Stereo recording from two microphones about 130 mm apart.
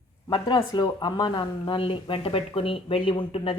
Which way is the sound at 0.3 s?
35° left (ahead or behind).